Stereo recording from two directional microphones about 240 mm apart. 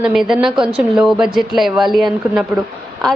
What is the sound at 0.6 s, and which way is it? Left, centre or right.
Speech, right.